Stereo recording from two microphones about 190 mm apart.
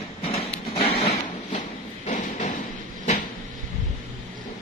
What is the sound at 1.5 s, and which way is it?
Train, 45° left (ahead or behind).